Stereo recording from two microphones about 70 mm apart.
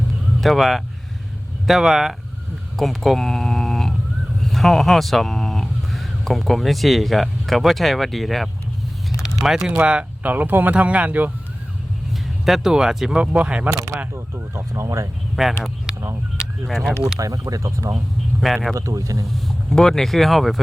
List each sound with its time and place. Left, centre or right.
0.4 s speech: centre
9.6 s speech: centre
12.5 s speech: centre
13.7 s speech: right
14.1 s speech: right
14.7 s speech: right
15.4 s speech: centre
16.6 s speech: centre
17.2 s speech: right
17.9 s speech: centre
18.7 s speech: right
19.5 s speech: centre